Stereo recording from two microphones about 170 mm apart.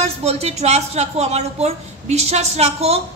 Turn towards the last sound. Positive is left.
turn(degrees=-40)  # may be behind; listen again after turning